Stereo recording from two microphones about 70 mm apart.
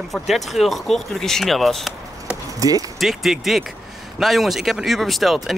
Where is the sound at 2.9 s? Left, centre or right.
Centre.